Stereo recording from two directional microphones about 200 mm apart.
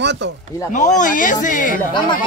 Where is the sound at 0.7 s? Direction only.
40° left (ahead or behind).